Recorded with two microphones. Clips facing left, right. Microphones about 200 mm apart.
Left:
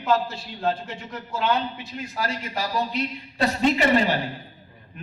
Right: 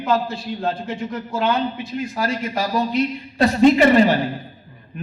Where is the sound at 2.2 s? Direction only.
50° right (ahead or behind).